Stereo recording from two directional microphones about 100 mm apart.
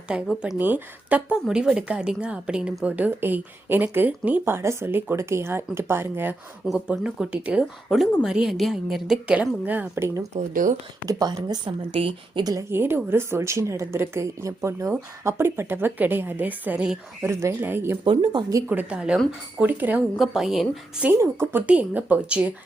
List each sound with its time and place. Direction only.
0.1 s a woman's voice: 10° right (ahead or behind)
6.7 s a woman's voice: 10° right (ahead or behind); by 10.2 s 25° right (ahead or behind)
11.0 s a woman's voice: 40° right (ahead or behind); by 12.4 s 60° right (ahead or behind)
12.4 s a woman's voice: 40° right (ahead or behind)
12.7 s speech: 25° right (ahead or behind)
18.0 s a woman's voice: 60° right (ahead or behind)
18.7 s a woman's voice: 15° right (ahead or behind)
20.1 s a woman's voice: centre (ahead or behind)
21.5 s a woman's voice: 15° right (ahead or behind)